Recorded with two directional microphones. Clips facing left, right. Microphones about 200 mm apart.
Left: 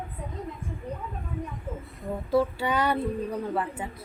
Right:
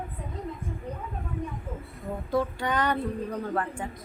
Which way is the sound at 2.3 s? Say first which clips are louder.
Left 3 dB; 5° left (ahead or behind).